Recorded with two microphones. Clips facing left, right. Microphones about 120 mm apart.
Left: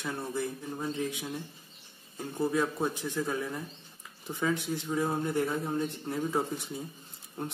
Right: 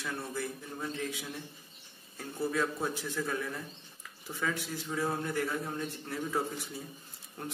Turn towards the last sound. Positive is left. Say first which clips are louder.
# left 4 dB
turn(degrees=20)  # may be behind; listen again after turning